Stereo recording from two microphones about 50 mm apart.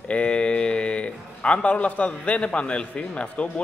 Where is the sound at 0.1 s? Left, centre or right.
Left.